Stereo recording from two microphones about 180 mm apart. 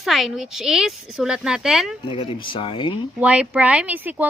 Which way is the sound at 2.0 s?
30° left (ahead or behind).